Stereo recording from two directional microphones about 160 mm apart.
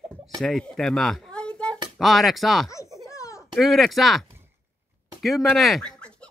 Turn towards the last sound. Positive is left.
turn(degrees=0)  # may be behind; listen again after turning